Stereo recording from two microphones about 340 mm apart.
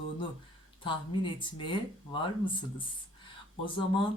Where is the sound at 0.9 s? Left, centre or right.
Centre.